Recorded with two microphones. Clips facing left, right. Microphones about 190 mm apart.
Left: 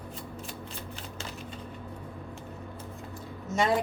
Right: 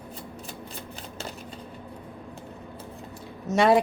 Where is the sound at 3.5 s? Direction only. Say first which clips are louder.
Right 7 dB; 70° right (ahead or behind).